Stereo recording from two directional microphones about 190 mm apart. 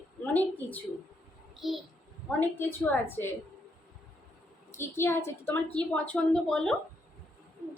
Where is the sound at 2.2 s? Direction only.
10° left (ahead or behind).